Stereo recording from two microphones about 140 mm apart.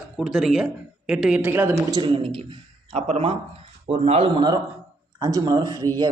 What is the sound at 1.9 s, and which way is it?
Speech, 35° right (ahead or behind).